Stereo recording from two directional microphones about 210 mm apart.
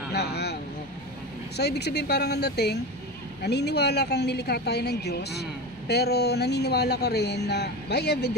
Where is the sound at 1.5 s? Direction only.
50° left (ahead or behind).